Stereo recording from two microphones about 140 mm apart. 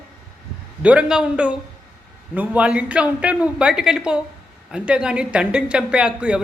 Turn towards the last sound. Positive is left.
turn(degrees=-5)  # may be behind; listen again after turning